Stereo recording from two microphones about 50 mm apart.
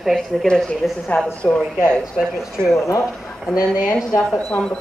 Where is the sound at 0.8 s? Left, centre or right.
Centre.